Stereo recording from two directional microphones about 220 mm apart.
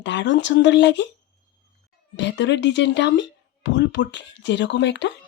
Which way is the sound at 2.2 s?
50° left (ahead or behind).